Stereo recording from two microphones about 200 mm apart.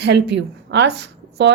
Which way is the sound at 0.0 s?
60° right (ahead or behind).